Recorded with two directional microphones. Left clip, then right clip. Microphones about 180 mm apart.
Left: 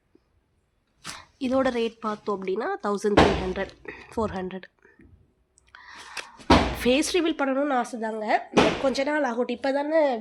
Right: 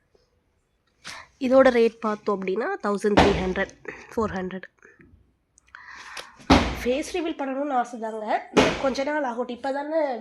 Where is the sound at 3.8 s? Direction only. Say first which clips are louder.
Right 2 dB; 5° right (ahead or behind).